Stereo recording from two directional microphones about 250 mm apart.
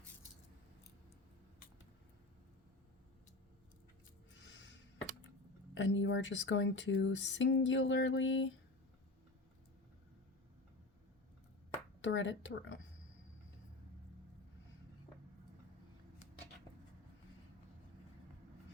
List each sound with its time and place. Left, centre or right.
4.4 s a sound: left
5.7 s speech: left
12.0 s speech: left